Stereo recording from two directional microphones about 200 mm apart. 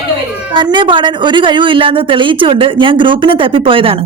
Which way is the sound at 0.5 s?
25° right (ahead or behind).